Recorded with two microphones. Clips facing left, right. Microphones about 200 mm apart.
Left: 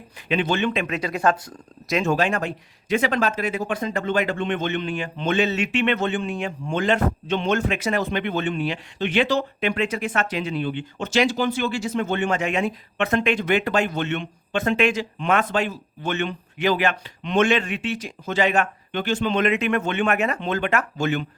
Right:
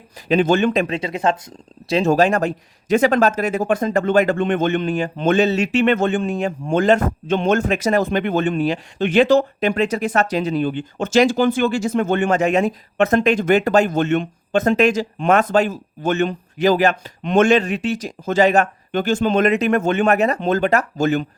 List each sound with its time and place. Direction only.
0.3 s speech: 45° right (ahead or behind)
0.9 s speech: 25° right (ahead or behind); by 21.2 s 40° right (ahead or behind)